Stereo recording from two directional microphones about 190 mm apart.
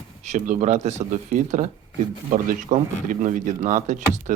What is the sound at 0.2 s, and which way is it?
Speech, 40° right (ahead or behind).